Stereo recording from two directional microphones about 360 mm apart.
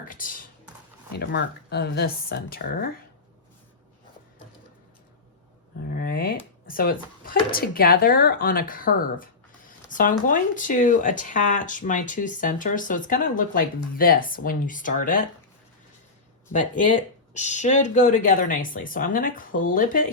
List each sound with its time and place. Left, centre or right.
0.1 s speech: left
5.8 s speech: left
17.3 s speech: centre